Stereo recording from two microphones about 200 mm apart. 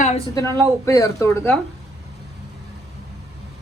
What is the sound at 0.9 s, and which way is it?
Speech, 15° left (ahead or behind).